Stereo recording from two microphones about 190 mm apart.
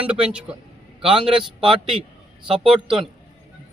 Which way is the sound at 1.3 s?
25° right (ahead or behind).